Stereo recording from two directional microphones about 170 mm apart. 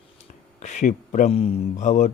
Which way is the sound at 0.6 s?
45° left (ahead or behind).